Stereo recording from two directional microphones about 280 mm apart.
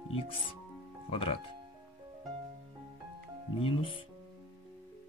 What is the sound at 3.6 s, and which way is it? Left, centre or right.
Speech, centre.